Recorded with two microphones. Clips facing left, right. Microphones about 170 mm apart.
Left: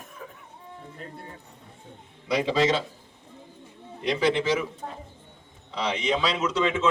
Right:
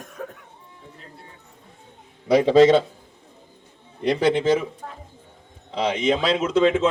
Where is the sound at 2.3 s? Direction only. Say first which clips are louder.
Right 9 dB; 50° right (ahead or behind).